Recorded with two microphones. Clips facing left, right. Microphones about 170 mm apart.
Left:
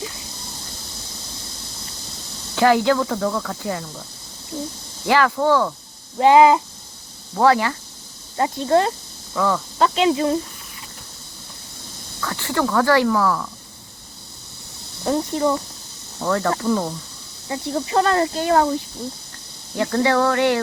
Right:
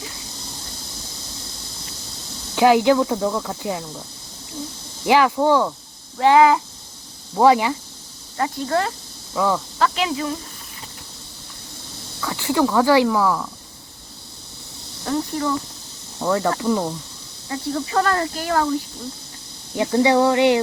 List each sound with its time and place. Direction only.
2.6 s speech: 15° right (ahead or behind)
5.0 s speech: 15° right (ahead or behind)
6.1 s speech: 20° left (ahead or behind)
7.3 s speech: 15° right (ahead or behind)
8.4 s speech: 25° left (ahead or behind)
9.3 s speech: 10° right (ahead or behind)
9.7 s speech: 25° left (ahead or behind)
12.2 s speech: 10° right (ahead or behind)
15.0 s speech: 25° left (ahead or behind)
16.1 s speech: 15° right (ahead or behind)
17.5 s speech: 25° left (ahead or behind)
19.7 s speech: 15° right (ahead or behind)